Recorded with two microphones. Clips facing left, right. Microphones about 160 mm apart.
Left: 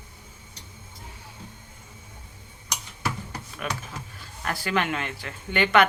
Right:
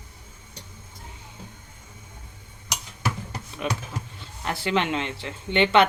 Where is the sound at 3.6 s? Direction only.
20° right (ahead or behind).